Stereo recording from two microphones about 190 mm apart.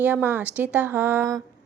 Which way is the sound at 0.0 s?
10° right (ahead or behind).